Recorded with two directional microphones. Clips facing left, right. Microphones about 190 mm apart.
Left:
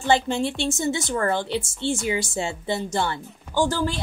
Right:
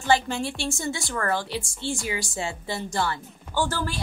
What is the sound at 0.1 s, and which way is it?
Speech, 25° left (ahead or behind).